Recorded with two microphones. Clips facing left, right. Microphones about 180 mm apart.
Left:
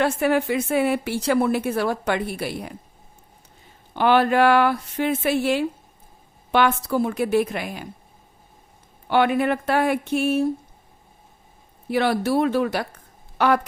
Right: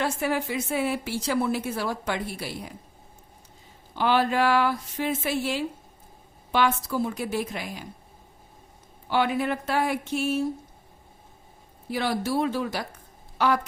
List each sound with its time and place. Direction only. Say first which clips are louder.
0.0 s a woman's voice: left 6 dB; 60° left (ahead or behind)
3.9 s a woman's voice: left 5 dB; 60° left (ahead or behind)
9.0 s a woman's voice: left 5 dB; 60° left (ahead or behind)
11.9 s a woman's voice: left 6 dB; 65° left (ahead or behind)